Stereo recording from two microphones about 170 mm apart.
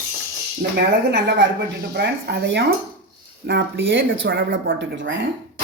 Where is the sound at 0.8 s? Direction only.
85° right.